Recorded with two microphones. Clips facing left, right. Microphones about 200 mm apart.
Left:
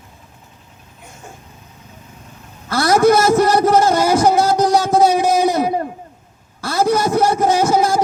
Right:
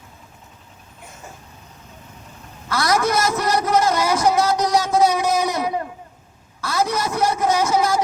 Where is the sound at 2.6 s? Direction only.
30° left (ahead or behind).